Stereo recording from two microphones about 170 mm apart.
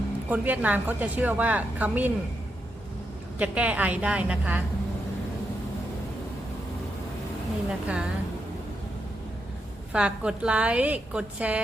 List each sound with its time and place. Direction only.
0.3 s a woman's voice: 10° right (ahead or behind)
3.3 s a woman's voice: 10° right (ahead or behind)
7.7 s a woman's voice: 5° right (ahead or behind)
9.9 s a woman's voice: 5° right (ahead or behind)